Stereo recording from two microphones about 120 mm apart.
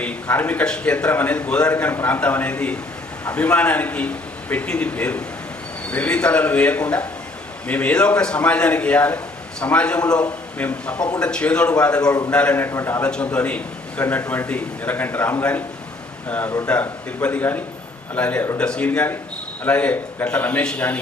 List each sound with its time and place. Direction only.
0.0 s a man's voice: 10° left (ahead or behind)
13.1 s a man's voice: 10° left (ahead or behind)